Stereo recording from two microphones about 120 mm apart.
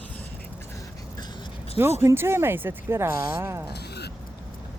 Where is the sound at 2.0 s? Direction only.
20° right (ahead or behind).